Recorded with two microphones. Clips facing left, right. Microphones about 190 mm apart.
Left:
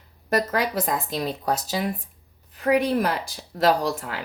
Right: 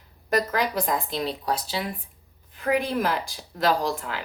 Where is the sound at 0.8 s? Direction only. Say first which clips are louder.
Left 1 dB; 45° left (ahead or behind).